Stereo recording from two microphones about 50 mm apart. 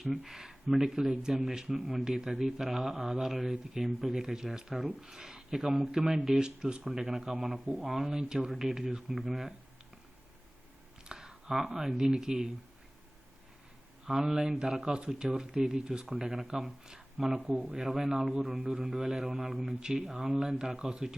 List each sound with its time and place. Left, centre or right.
0.0 s speech: centre
11.1 s speech: centre
14.0 s speech: centre
18.5 s speech: centre